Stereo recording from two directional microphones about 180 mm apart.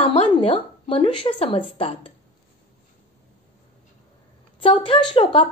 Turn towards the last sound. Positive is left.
turn(degrees=30)  # may be behind; listen again after turning